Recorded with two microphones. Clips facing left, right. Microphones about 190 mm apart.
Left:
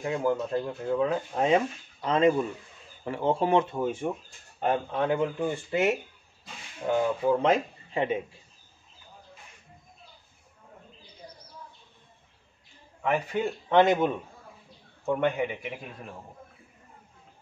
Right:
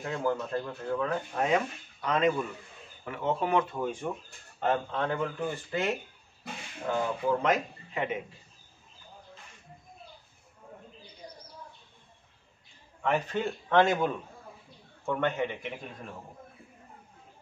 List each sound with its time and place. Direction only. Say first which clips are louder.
0.0 s speech: left 3 dB; 15° left (ahead or behind)
3.7 s speech: left 4 dB; 10° left (ahead or behind); by 8.2 s 30° left (ahead or behind)
13.0 s speech: left 2 dB; 10° left (ahead or behind)